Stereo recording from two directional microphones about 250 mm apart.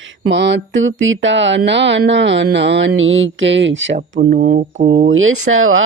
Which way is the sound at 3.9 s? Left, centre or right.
Right.